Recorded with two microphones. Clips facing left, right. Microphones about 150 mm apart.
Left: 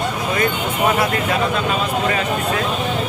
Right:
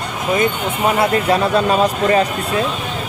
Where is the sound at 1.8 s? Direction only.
40° right (ahead or behind).